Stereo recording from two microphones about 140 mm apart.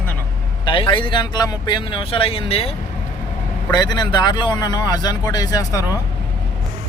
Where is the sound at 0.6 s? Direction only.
35° left (ahead or behind).